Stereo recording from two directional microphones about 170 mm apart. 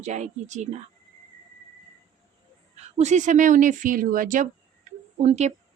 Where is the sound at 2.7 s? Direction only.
40° right (ahead or behind).